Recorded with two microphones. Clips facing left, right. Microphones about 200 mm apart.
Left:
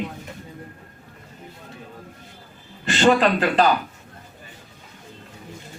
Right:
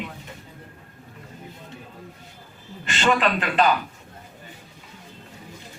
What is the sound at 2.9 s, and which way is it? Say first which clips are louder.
Speech: left 5 dB; 35° left (ahead or behind).